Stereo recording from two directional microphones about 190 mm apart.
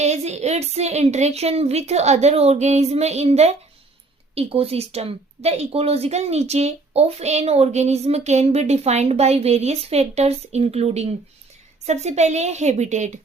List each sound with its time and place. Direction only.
0.0 s speech: 35° right (ahead or behind)